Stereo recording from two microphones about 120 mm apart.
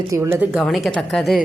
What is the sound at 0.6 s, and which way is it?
Speech, centre (ahead or behind).